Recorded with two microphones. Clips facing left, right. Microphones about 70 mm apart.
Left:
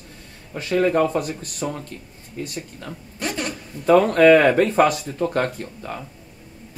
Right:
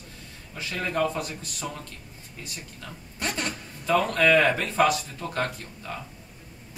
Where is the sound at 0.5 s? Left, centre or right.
Left.